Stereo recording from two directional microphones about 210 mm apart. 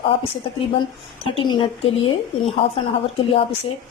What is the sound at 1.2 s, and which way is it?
A woman's voice, 25° left (ahead or behind).